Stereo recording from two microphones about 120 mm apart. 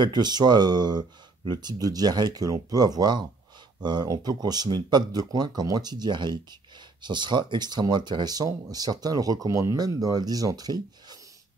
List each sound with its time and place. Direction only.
0.0 s speech: 35° right (ahead or behind)